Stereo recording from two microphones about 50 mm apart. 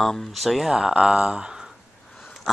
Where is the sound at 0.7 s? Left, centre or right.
Centre.